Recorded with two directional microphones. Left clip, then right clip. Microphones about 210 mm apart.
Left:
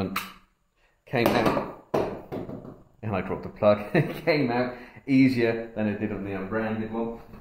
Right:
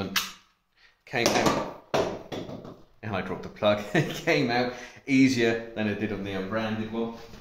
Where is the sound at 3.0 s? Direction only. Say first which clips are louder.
Left 2 dB; 30° left (ahead or behind); by 6.3 s 5° left (ahead or behind).